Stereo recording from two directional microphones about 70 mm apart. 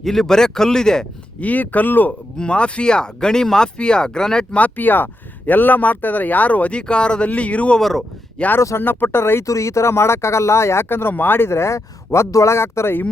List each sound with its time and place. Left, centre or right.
0.0 s speech: centre
1.4 s speech: left
2.4 s speech: centre
4.5 s speech: left
7.8 s speech: centre
8.4 s speech: left
9.5 s speech: left